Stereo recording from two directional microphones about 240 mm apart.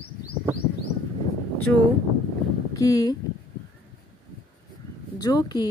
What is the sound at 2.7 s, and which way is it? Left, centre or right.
Speech, centre.